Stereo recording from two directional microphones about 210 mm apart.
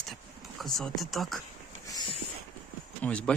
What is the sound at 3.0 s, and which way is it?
Speech, 5° left (ahead or behind).